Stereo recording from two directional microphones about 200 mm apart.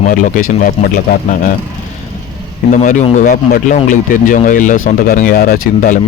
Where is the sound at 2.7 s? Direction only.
40° left (ahead or behind).